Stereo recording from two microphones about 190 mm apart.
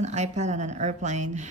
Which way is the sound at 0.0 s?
35° right (ahead or behind).